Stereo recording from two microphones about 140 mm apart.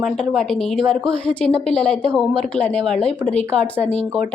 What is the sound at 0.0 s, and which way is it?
A woman's voice, centre (ahead or behind).